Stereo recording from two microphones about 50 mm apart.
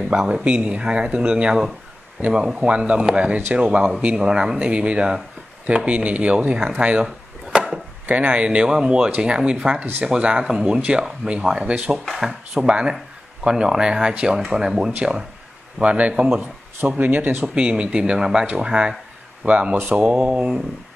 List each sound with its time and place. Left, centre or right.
0.0 s speech: centre
7.5 s chop: centre
8.1 s speech: right
10.8 s speech: right
12.0 s speech: centre
12.3 s speech: centre
15.8 s speech: right
16.8 s speech: right
17.6 s speech: right
19.4 s speech: right